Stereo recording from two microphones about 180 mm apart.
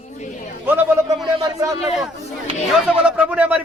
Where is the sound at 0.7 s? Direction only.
10° right (ahead or behind).